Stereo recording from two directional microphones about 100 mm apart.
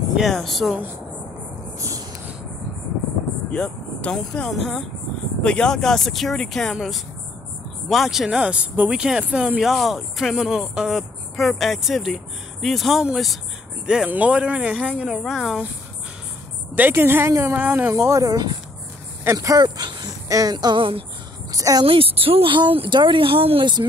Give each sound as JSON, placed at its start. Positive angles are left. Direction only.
{"t": 0.1, "sound": "speech", "side_deg": 0}
{"t": 3.5, "sound": "speech", "side_deg": 10}
{"t": 15.1, "sound": "speech", "side_deg": 0}
{"t": 16.7, "sound": "a woman's voice", "side_deg": -20}
{"t": 17.9, "sound": "speech", "side_deg": -30}
{"t": 19.3, "sound": "music", "side_deg": -40}
{"t": 21.5, "sound": "a woman's voice", "side_deg": -35}
{"t": 21.8, "sound": "speech", "side_deg": -70}
{"t": 23.6, "sound": "music", "side_deg": -50}